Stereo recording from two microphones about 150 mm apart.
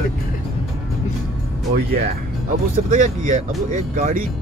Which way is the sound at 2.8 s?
55° right (ahead or behind).